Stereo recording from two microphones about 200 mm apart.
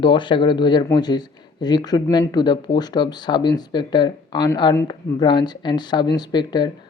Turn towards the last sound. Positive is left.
turn(degrees=20)  # may be behind; listen again after turning